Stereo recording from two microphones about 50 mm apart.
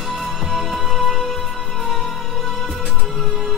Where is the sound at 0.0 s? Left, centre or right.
Centre.